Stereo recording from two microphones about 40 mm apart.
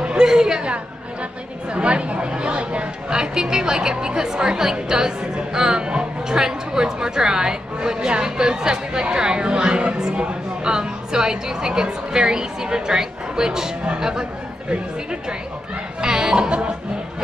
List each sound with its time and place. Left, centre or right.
0.0 s a woman's voice: right
1.7 s speech: right
3.2 s a woman's voice: centre